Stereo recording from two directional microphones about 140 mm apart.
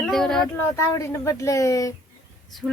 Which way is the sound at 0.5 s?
20° left (ahead or behind).